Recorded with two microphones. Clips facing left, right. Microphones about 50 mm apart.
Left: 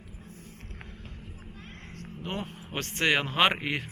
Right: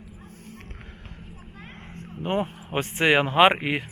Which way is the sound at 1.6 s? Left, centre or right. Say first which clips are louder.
Right 3 dB; centre.